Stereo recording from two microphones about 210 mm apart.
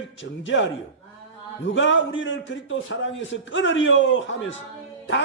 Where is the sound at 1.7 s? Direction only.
65° left (ahead or behind).